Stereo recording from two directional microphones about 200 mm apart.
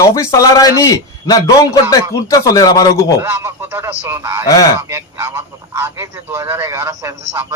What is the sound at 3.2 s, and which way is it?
A man's voice, 10° right (ahead or behind).